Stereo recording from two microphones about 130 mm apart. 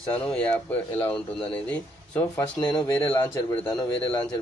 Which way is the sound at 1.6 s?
10° left (ahead or behind).